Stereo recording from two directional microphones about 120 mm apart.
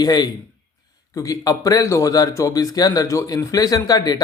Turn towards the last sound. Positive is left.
turn(degrees=35)  # may be behind; listen again after turning